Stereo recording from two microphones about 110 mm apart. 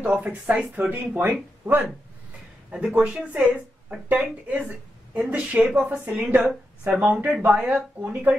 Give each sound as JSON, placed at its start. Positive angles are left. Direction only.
{"t": 0.1, "sound": "speech", "side_deg": -10}